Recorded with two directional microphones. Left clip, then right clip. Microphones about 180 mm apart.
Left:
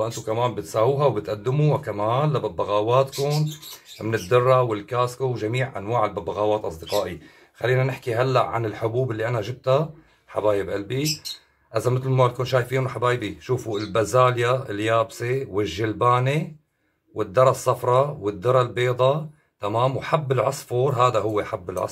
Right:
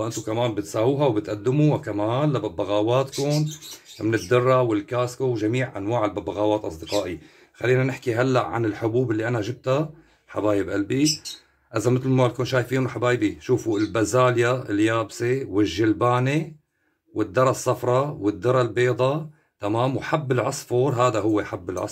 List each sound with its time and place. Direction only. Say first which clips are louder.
0.0 s speech: left 1 dB; 35° right (ahead or behind)